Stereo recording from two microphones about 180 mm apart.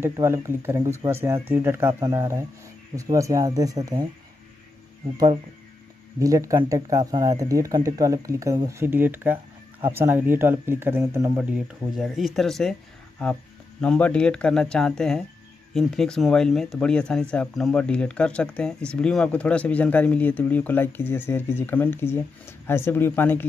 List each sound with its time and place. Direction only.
0.0 s speech: 15° right (ahead or behind)
6.1 s speech: 20° right (ahead or behind)
11.5 s speech: centre (ahead or behind)